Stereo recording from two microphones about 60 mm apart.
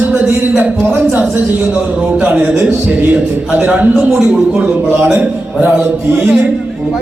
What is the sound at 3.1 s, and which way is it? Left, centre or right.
Speech, centre.